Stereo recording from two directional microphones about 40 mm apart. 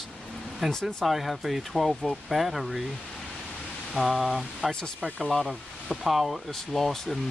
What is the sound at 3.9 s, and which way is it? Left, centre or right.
Speech, centre.